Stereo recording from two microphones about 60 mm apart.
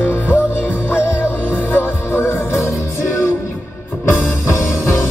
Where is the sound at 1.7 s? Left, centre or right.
Left.